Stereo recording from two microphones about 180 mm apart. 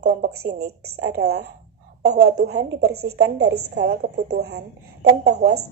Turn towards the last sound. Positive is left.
turn(degrees=-65)  # may be behind; listen again after turning